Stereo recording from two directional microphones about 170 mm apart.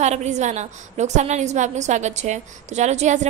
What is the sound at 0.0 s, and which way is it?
A woman's voice, 40° right (ahead or behind).